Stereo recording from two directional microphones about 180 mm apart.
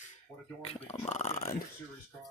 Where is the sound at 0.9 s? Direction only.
40° left (ahead or behind).